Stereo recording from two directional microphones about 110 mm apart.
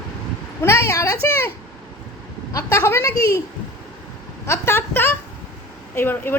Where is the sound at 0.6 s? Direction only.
25° left (ahead or behind).